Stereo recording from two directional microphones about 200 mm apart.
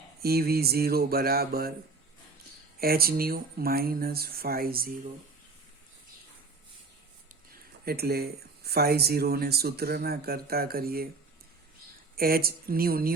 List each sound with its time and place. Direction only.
0.2 s speech: 50° right (ahead or behind)
2.8 s speech: 50° right (ahead or behind)
7.9 s speech: 50° right (ahead or behind)
12.1 s speech: 50° right (ahead or behind)